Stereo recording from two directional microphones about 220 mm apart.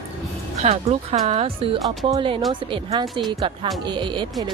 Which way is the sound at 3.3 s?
20° right (ahead or behind).